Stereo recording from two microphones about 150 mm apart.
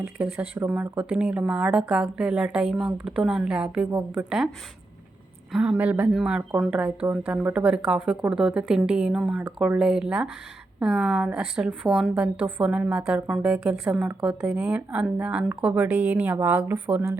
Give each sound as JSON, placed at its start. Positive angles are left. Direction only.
{"t": 0.0, "sound": "a woman's voice", "side_deg": -10}
{"t": 5.5, "sound": "a woman's voice", "side_deg": -5}